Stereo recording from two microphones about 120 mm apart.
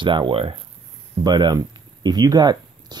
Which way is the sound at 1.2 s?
35° right (ahead or behind).